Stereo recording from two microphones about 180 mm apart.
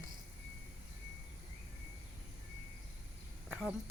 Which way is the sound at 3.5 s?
Centre (ahead or behind).